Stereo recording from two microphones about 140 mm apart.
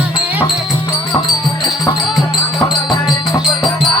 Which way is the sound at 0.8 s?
30° left (ahead or behind).